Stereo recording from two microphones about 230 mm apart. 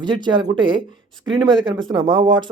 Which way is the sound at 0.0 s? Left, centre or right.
Centre.